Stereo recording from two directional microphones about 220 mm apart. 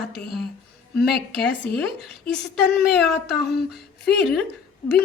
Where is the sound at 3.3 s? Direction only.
45° left (ahead or behind).